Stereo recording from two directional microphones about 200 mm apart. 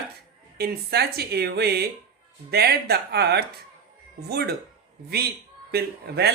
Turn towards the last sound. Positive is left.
turn(degrees=-55)  # may be behind; listen again after turning